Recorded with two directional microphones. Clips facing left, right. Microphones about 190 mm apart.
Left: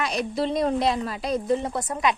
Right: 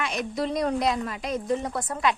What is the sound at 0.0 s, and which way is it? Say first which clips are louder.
A woman's voice: left 3 dB; 35° left (ahead or behind).